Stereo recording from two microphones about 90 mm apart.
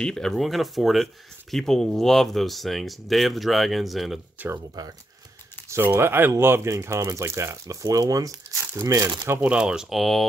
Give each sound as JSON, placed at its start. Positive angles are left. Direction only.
{"t": 0.0, "sound": "speech", "side_deg": 5}
{"t": 4.4, "sound": "speech", "side_deg": -20}
{"t": 4.8, "sound": "speech", "side_deg": -45}
{"t": 5.7, "sound": "speech", "side_deg": -25}
{"t": 9.2, "sound": "speech", "side_deg": -20}
{"t": 9.5, "sound": "speech", "side_deg": -10}